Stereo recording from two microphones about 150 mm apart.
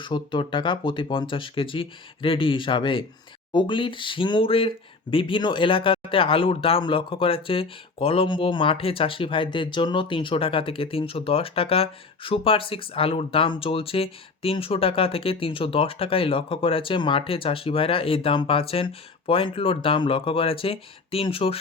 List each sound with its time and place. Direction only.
0.0 s speech: 35° left (ahead or behind)